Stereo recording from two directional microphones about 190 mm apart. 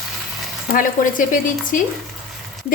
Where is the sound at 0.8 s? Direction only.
45° left (ahead or behind).